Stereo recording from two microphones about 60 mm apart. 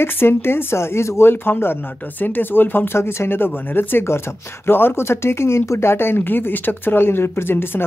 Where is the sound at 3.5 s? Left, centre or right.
Left.